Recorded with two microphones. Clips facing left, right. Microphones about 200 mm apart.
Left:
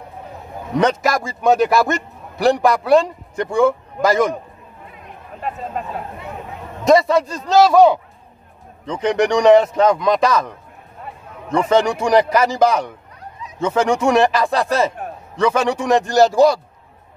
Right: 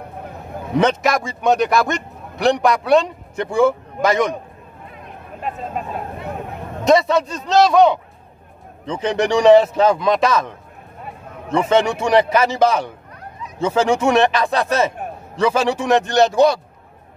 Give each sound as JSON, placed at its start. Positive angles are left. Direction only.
{"t": 0.7, "sound": "a man's voice", "side_deg": 0}
{"t": 6.8, "sound": "a man's voice", "side_deg": 0}
{"t": 8.9, "sound": "a man's voice", "side_deg": -25}
{"t": 9.6, "sound": "a man's voice", "side_deg": -5}
{"t": 11.5, "sound": "a man's voice", "side_deg": -5}